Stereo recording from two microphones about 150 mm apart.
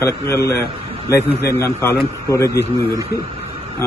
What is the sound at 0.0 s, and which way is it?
A man's voice, 20° left (ahead or behind).